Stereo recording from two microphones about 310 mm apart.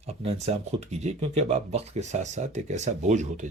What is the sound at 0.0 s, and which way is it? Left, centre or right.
Speech, centre.